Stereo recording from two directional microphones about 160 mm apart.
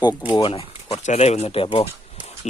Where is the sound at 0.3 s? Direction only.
30° left (ahead or behind).